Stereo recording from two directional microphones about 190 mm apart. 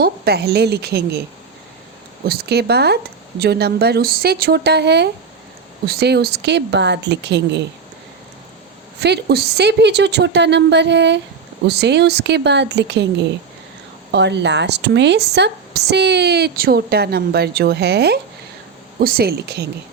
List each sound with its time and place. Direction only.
0.0 s a woman's voice: 55° right (ahead or behind)
2.2 s a woman's voice: 55° right (ahead or behind)
9.0 s a woman's voice: 60° right (ahead or behind)